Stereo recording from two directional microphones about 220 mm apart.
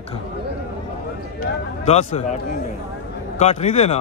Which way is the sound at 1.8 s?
30° left (ahead or behind).